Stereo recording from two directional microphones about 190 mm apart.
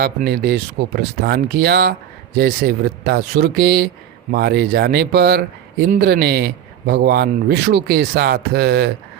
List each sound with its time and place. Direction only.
0.0 s speech: 55° right (ahead or behind)